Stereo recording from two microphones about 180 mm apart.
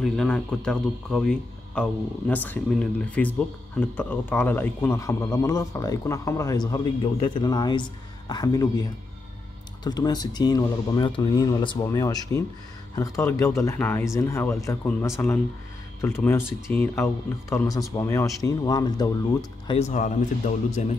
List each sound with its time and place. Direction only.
0.0 s speech: 5° left (ahead or behind); by 8.8 s 20° left (ahead or behind)
9.8 s speech: 20° left (ahead or behind)
19.8 s speech: 45° left (ahead or behind)